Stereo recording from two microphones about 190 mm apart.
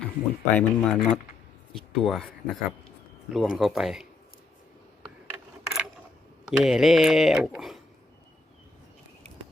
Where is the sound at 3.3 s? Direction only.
Centre (ahead or behind).